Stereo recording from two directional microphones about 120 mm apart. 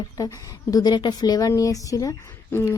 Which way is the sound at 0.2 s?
30° left (ahead or behind).